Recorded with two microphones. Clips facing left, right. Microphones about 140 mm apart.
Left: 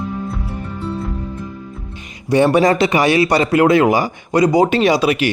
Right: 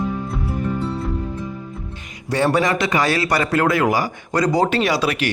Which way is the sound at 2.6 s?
35° left (ahead or behind).